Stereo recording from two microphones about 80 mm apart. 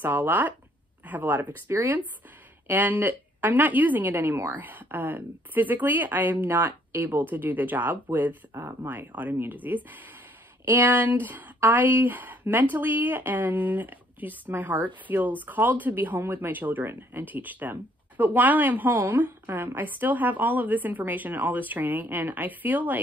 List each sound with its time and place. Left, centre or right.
0.0 s speech: right
1.7 s speech: right
2.7 s speech: right
4.6 s speech: right